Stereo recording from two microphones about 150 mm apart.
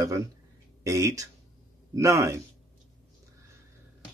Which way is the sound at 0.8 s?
20° right (ahead or behind).